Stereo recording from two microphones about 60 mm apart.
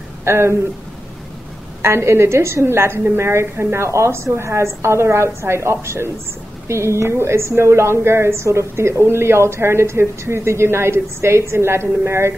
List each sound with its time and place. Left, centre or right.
0.2 s speech: right
1.8 s a woman's voice: right